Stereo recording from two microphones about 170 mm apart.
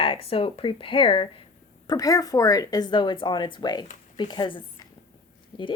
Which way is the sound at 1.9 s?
20° left (ahead or behind).